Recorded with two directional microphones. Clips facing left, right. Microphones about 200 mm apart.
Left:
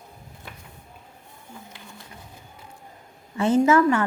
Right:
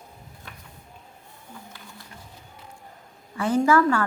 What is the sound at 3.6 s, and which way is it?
Speech, 20° left (ahead or behind).